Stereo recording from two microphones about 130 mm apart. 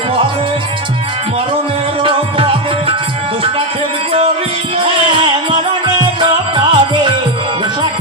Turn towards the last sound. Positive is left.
turn(degrees=-40)  # may be behind; listen again after turning